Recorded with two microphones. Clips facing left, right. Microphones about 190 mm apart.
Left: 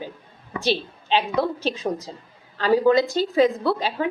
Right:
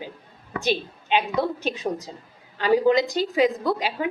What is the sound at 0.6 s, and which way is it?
Speech, 35° left (ahead or behind).